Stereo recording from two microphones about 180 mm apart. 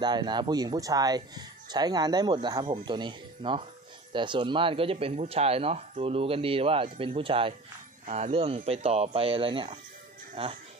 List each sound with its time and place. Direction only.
0.0 s speech: 25° right (ahead or behind)